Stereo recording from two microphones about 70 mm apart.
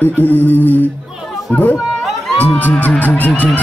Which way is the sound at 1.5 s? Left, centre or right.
Left.